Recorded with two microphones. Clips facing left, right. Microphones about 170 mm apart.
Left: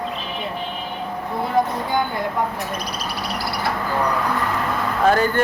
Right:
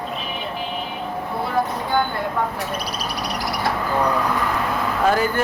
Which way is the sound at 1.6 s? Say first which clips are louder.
Left 3 dB; 15° left (ahead or behind).